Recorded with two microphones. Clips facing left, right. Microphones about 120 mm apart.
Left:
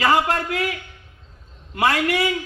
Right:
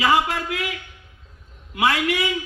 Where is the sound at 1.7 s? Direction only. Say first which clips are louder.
Left 1 dB; 50° left (ahead or behind).